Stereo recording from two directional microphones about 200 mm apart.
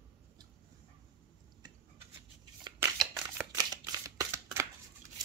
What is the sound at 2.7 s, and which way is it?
Scissors, 10° right (ahead or behind).